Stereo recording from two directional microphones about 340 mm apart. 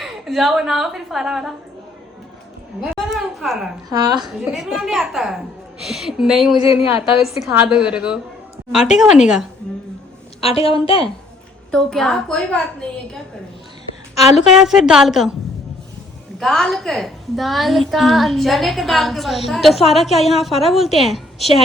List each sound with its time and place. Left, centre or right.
0.0 s a woman's voice: centre
3.1 s a sound: centre
3.8 s a woman's voice: centre
10.4 s a woman's voice: centre
11.7 s a woman's voice: centre
14.4 s a woman's voice: centre
16.4 s a woman's voice: centre